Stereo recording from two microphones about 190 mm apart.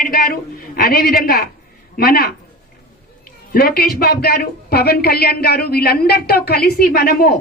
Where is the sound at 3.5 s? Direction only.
50° left (ahead or behind).